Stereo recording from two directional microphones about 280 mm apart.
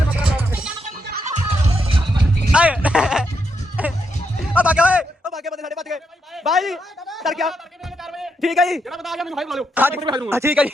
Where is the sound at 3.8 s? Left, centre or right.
Centre.